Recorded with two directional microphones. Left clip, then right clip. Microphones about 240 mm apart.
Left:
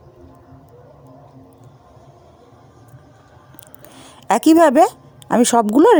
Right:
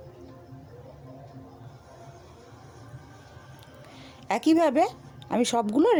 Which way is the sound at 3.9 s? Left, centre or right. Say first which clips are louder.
Left 11 dB; left.